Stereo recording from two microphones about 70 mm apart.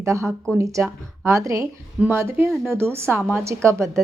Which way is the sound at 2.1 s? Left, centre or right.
Right.